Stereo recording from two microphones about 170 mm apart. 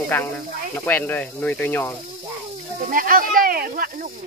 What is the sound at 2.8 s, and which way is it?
Speech, 55° right (ahead or behind).